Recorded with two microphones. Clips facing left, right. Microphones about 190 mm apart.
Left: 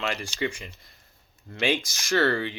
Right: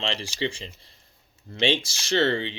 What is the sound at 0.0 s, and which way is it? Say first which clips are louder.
Speech: even; 30° right (ahead or behind).